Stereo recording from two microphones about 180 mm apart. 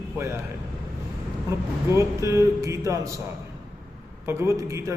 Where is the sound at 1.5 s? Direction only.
15° right (ahead or behind).